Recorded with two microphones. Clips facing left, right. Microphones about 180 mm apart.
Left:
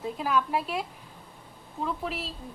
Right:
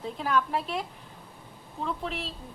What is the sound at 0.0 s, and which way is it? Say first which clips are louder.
Speech: even; 5° left (ahead or behind).